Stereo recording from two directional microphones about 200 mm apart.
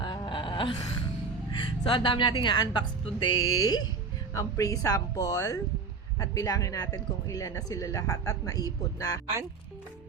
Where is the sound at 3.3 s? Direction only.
90° left.